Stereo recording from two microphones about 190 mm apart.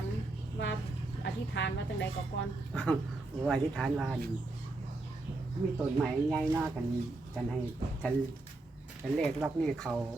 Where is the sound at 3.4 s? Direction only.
5° left (ahead or behind).